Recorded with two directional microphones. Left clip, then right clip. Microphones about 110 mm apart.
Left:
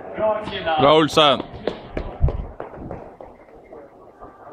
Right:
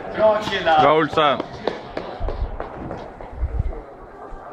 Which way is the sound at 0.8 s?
35° left (ahead or behind).